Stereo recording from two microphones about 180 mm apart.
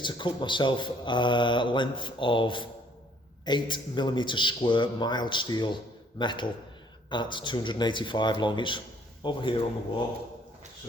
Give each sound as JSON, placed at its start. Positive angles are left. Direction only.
{"t": 0.0, "sound": "a man's voice", "side_deg": 25}